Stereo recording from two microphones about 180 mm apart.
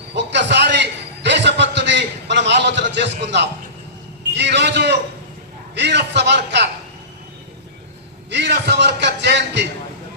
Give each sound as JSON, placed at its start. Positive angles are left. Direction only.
{"t": 0.2, "sound": "a sound", "side_deg": -75}
{"t": 4.4, "sound": "a man's voice", "side_deg": -70}
{"t": 8.3, "sound": "a man's voice", "side_deg": -75}